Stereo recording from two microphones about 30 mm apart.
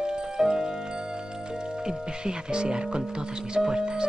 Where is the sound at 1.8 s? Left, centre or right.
Right.